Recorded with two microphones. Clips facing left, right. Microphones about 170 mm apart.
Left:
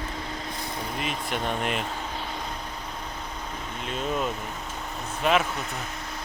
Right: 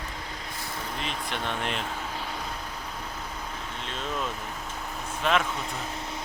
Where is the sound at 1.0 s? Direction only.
5° left (ahead or behind).